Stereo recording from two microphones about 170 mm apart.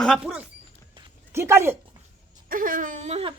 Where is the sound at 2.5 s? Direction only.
55° right (ahead or behind); by 3.3 s 40° right (ahead or behind).